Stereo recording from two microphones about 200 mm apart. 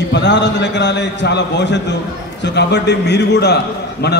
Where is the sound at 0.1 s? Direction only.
60° left (ahead or behind).